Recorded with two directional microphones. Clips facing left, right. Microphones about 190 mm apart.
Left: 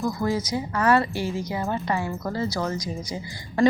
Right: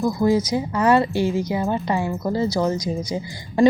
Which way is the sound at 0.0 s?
15° right (ahead or behind).